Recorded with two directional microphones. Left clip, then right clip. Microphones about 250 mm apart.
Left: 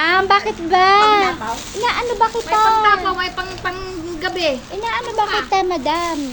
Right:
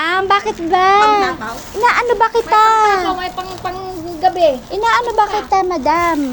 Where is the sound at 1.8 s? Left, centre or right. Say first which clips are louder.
Right 5 dB; centre.